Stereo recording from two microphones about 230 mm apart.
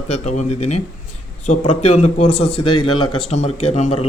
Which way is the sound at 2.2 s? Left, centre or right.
Left.